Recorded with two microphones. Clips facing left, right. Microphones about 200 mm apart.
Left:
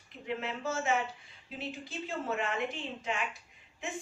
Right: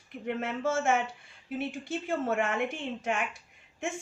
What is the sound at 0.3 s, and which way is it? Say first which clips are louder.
Speech: right 5 dB; 55° right (ahead or behind).